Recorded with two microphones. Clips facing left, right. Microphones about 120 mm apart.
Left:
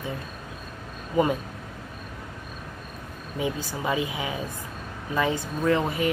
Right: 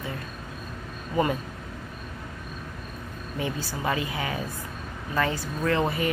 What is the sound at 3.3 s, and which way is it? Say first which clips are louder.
Speech: left 2 dB; 15° left (ahead or behind).